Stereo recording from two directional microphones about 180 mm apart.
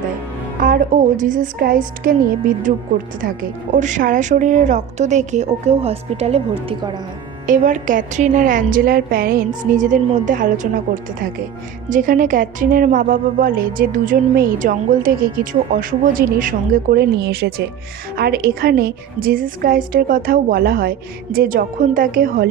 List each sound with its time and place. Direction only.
0.6 s a woman's voice: 50° right (ahead or behind)
3.2 s a woman's voice: 45° right (ahead or behind)
7.4 s a woman's voice: 45° right (ahead or behind)
11.9 s a woman's voice: 50° right (ahead or behind)